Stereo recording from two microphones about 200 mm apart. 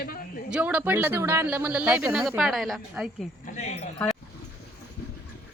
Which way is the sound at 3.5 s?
35° left (ahead or behind).